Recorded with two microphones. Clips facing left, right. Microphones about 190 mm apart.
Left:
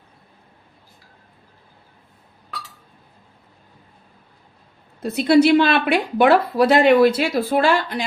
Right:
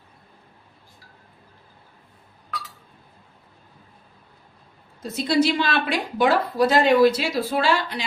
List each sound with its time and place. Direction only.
5.0 s a woman's voice: 60° left (ahead or behind)